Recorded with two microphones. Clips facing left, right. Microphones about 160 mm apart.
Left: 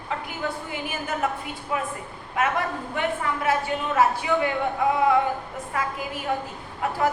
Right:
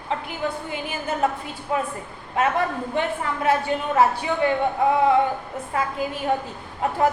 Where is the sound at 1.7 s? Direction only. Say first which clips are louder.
Right 4 dB; 35° right (ahead or behind).